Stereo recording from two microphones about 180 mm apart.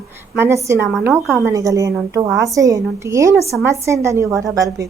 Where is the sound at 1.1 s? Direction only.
Centre (ahead or behind).